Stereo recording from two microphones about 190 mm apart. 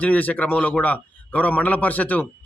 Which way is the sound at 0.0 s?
10° left (ahead or behind).